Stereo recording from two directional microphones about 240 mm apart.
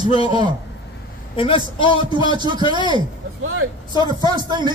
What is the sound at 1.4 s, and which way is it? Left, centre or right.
Speech, left.